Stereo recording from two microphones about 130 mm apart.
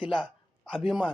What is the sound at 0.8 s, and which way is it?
Speech, 5° right (ahead or behind).